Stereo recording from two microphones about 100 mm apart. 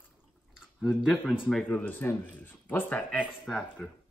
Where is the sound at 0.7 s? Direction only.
Centre (ahead or behind).